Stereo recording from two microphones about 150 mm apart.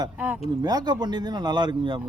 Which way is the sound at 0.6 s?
25° right (ahead or behind).